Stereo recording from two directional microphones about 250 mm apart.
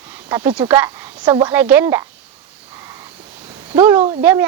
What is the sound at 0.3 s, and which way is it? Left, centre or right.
Speech, centre.